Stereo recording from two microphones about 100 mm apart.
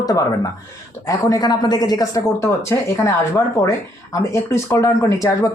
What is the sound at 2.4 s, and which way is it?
Speech, 30° left (ahead or behind).